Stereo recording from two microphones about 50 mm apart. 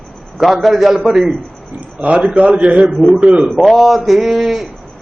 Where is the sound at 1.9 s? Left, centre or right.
Right.